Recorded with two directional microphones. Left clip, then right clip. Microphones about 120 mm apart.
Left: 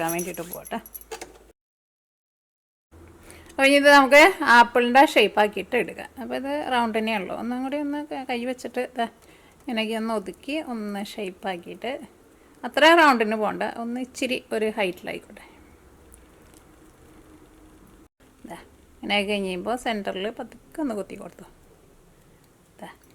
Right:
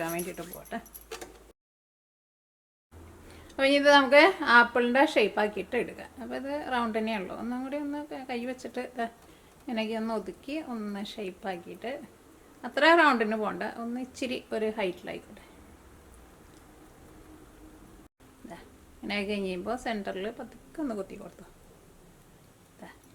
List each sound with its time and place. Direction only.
0.1 s speech: 40° left (ahead or behind)
3.4 s speech: 35° left (ahead or behind)
19.0 s speech: 35° left (ahead or behind)
22.8 s speech: 35° left (ahead or behind)